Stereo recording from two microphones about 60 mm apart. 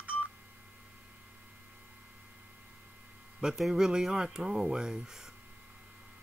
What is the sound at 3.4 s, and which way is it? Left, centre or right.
Speech, centre.